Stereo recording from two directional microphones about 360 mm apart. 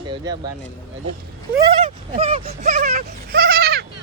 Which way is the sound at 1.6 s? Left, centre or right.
Centre.